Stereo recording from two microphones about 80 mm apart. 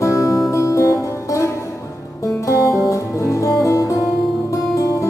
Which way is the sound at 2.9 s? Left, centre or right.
Left.